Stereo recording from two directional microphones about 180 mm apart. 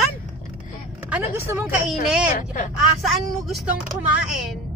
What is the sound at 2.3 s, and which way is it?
Speech, 45° left (ahead or behind).